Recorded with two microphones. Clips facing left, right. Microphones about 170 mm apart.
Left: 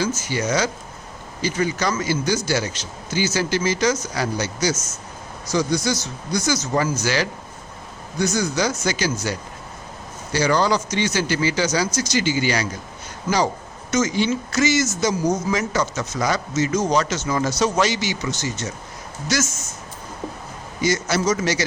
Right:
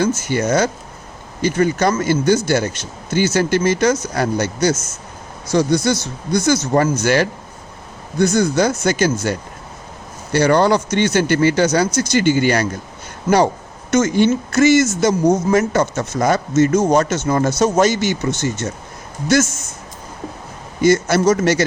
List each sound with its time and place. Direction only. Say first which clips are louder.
0.2 s speech: right 5 dB; 55° right (ahead or behind)
10.3 s speech: right 6 dB; 55° right (ahead or behind)
13.9 s speech: right 6 dB; 55° right (ahead or behind)
20.8 s speech: right 7 dB; 55° right (ahead or behind)